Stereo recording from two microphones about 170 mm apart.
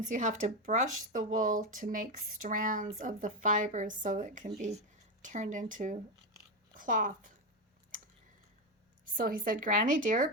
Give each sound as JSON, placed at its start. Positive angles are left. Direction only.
{"t": 0.1, "sound": "speech", "side_deg": -45}
{"t": 9.0, "sound": "speech", "side_deg": -55}